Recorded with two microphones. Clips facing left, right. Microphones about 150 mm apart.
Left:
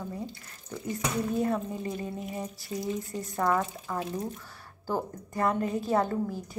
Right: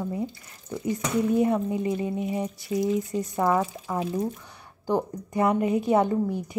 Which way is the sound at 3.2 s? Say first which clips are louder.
Right 2 dB; 20° right (ahead or behind).